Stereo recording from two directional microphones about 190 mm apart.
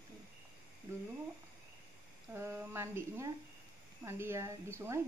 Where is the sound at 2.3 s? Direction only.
15° right (ahead or behind).